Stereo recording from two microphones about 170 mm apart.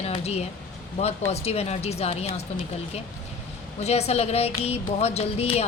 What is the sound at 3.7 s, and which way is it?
A woman's voice, 40° left (ahead or behind).